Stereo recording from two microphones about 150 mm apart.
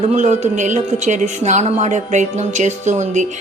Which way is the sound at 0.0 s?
50° right (ahead or behind).